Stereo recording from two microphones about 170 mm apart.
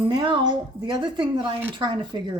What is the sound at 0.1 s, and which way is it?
Speech, 30° right (ahead or behind).